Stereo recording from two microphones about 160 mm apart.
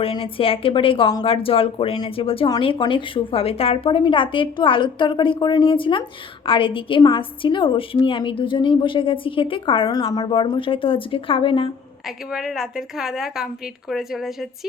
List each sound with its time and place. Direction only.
0.0 s a woman's voice: 35° left (ahead or behind)
12.3 s a woman's voice: 5° right (ahead or behind)